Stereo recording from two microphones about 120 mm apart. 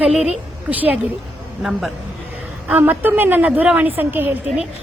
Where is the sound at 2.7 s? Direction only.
15° right (ahead or behind).